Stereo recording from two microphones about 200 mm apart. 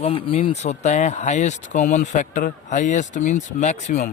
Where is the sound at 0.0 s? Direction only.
25° left (ahead or behind).